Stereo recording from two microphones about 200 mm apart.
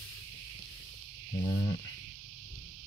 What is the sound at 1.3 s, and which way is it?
Speech, 20° left (ahead or behind).